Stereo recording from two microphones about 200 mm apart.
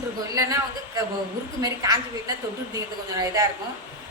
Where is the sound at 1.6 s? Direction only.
20° right (ahead or behind).